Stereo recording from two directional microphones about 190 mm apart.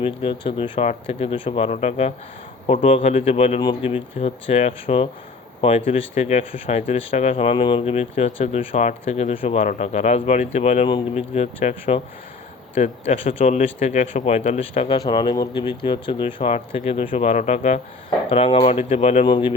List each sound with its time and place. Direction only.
0.0 s speech: 30° left (ahead or behind)